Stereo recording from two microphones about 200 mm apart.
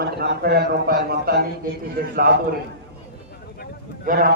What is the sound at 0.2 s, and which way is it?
A man's voice, 55° right (ahead or behind).